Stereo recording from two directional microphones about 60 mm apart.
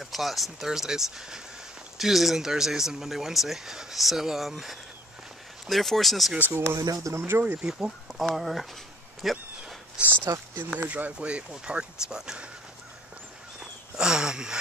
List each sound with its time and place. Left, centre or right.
0.0 s speech: centre
6.5 s speech: right
6.8 s speech: right
7.2 s speech: right
7.6 s speech: centre
8.2 s speech: centre
9.2 s a sound: centre
10.0 s speech: centre
13.6 s a sound: centre